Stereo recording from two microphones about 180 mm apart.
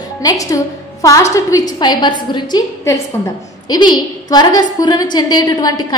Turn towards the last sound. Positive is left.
turn(degrees=20)  # may be behind; listen again after turning